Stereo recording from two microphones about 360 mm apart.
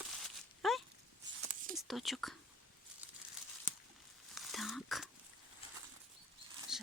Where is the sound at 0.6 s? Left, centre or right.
Centre.